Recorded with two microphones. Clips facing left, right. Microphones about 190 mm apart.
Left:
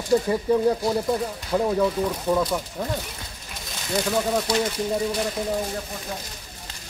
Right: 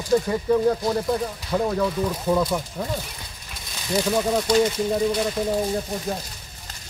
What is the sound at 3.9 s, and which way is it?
Speech, centre (ahead or behind).